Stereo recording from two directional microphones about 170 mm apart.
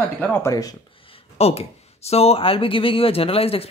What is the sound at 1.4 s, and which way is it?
Speech, 35° left (ahead or behind).